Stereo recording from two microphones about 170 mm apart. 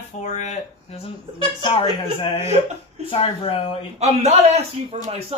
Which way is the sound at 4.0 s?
40° right (ahead or behind).